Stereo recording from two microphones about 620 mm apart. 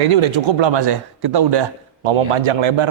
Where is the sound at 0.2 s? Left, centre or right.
Right.